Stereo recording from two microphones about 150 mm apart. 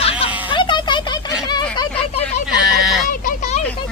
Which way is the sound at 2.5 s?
5° right (ahead or behind).